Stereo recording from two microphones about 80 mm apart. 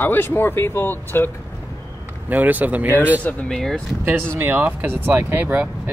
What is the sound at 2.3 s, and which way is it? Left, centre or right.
Speech, right.